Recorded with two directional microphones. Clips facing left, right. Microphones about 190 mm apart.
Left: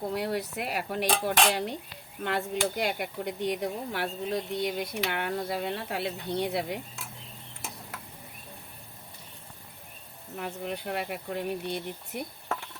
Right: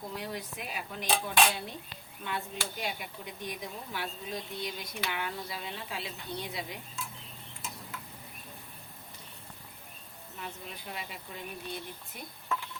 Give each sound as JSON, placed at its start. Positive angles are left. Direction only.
{"t": 0.1, "sound": "speech", "side_deg": 70}
{"t": 10.3, "sound": "speech", "side_deg": 60}